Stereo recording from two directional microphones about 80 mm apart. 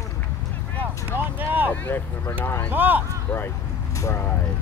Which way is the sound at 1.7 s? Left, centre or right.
Left.